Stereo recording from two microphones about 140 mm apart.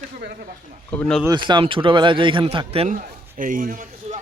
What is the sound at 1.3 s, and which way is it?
Speech, 35° right (ahead or behind).